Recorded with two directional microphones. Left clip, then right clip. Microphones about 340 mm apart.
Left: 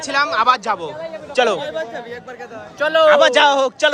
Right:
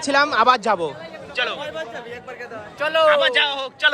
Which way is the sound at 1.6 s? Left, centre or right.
Left.